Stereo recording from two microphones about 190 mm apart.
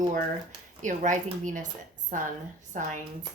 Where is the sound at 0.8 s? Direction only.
40° right (ahead or behind).